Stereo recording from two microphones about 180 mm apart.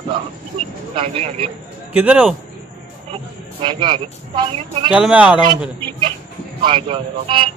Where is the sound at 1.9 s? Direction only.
10° right (ahead or behind).